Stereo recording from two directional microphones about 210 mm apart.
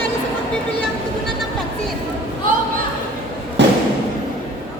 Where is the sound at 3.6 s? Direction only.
55° right (ahead or behind).